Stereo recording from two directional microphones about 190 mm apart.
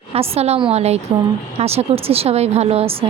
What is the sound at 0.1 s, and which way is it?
Speech, 30° right (ahead or behind).